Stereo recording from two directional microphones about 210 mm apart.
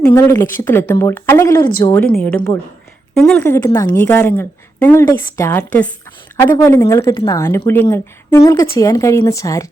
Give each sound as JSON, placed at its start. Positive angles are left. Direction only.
{"t": 0.0, "sound": "a woman's voice", "side_deg": 15}
{"t": 2.1, "sound": "a woman's voice", "side_deg": 5}